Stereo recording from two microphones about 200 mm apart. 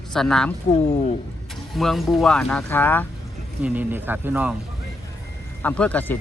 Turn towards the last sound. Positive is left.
turn(degrees=5)  # may be behind; listen again after turning